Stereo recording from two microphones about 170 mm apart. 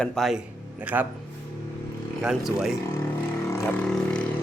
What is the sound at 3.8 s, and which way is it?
Speech, 5° left (ahead or behind).